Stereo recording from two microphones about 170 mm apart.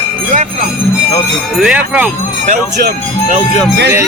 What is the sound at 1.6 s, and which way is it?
Speech, 5° right (ahead or behind).